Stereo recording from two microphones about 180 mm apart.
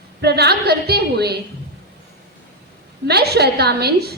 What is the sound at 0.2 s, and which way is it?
A woman's voice, 65° right (ahead or behind).